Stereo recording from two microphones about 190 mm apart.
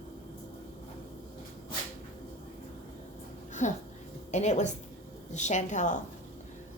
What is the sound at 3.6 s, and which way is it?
A woman's voice, 40° left (ahead or behind).